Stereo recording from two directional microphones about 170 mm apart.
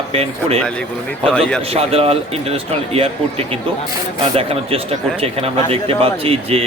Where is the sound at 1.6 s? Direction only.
35° right (ahead or behind).